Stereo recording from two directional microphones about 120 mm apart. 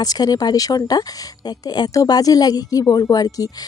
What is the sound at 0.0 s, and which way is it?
Speech, 35° left (ahead or behind).